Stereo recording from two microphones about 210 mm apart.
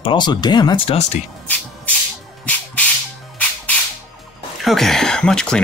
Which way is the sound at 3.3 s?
5° left (ahead or behind).